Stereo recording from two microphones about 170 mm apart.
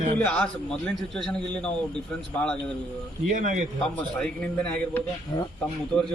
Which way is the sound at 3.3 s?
50° right (ahead or behind).